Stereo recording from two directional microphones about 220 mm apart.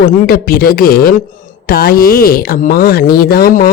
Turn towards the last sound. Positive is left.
turn(degrees=40)  # may be behind; listen again after turning